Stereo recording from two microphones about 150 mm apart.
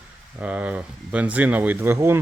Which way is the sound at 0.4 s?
10° right (ahead or behind).